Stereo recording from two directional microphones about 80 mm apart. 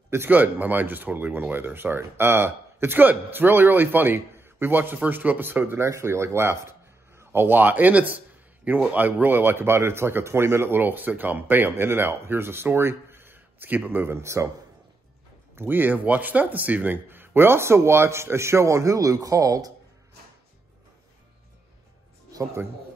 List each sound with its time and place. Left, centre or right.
0.1 s speech: right
15.5 s speech: right
22.3 s music: right